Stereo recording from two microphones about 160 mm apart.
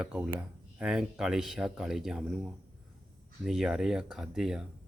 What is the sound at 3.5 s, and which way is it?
Speech, 5° right (ahead or behind).